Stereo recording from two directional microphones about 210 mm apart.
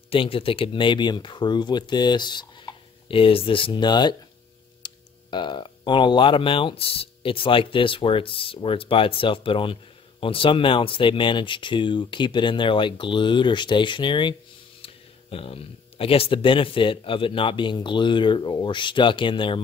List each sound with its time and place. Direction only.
0.1 s speech: 25° left (ahead or behind)